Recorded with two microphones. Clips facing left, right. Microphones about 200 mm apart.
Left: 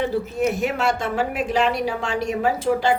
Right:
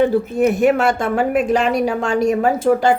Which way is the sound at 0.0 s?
55° right (ahead or behind).